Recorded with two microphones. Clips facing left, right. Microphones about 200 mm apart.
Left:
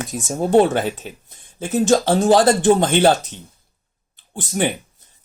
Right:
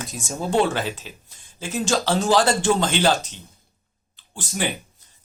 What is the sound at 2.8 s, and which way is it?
Speech, 55° left (ahead or behind).